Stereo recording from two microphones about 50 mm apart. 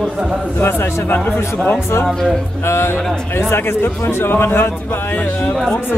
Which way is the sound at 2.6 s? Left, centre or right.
Left.